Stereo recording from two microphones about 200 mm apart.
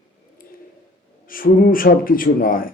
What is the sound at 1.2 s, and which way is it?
A man's voice, 45° left (ahead or behind).